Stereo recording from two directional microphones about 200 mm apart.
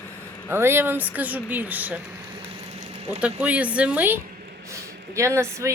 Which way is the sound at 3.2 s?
5° right (ahead or behind).